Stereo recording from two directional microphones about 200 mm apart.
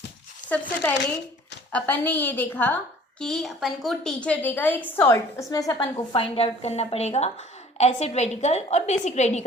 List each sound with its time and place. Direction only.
1.7 s a woman's voice: 10° left (ahead or behind); by 9.4 s 35° left (ahead or behind)